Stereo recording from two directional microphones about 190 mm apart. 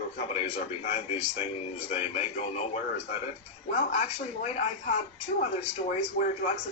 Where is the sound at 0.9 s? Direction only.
35° left (ahead or behind).